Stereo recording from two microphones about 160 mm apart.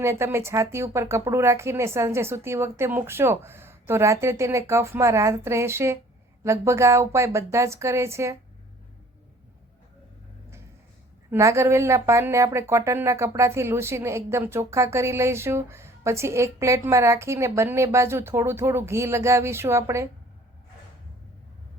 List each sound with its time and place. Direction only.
0.0 s speech: 15° right (ahead or behind)
11.3 s speech: 20° right (ahead or behind)